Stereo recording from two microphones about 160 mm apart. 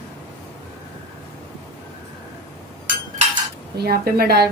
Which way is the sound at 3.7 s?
75° right (ahead or behind).